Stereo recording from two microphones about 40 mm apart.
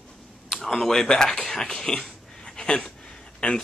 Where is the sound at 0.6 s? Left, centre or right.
Centre.